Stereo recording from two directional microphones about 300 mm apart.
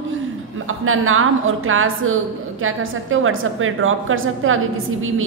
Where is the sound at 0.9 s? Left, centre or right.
Right.